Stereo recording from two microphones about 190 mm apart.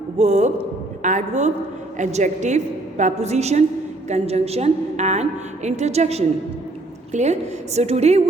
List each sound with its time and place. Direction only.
0.2 s a woman's voice: 35° right (ahead or behind)